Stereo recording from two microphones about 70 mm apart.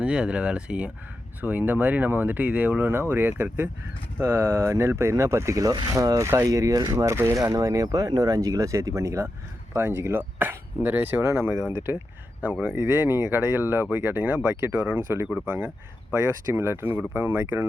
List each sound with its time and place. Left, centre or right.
0.0 s speech: centre
2.9 s speech: right
6.5 s speech: right
7.4 s speech: right
11.2 s speech: right
11.7 s speech: right